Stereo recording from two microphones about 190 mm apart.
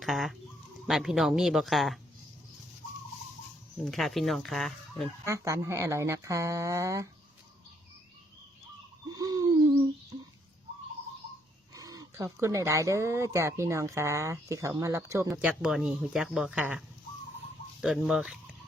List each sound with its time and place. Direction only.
0.0 s chicken: centre (ahead or behind)
0.9 s speech: centre (ahead or behind)
3.8 s speech: centre (ahead or behind)
5.2 s speech: 15° right (ahead or behind)
9.1 s owl: 20° right (ahead or behind)
11.7 s speech: 20° right (ahead or behind)
15.3 s speech: 5° right (ahead or behind)